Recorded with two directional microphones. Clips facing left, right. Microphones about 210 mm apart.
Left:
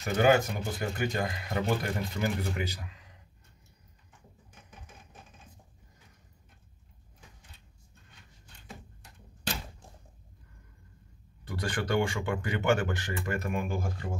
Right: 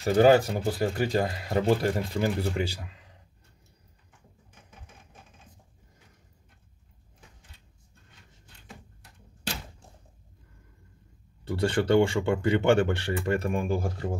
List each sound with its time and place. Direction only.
0.0 s speech: 35° right (ahead or behind)
11.4 s speech: 25° right (ahead or behind)